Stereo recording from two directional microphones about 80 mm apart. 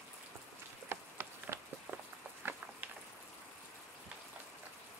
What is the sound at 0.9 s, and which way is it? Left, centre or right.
Insect, right.